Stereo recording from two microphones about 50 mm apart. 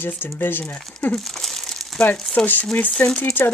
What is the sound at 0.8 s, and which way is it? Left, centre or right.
Speech, centre.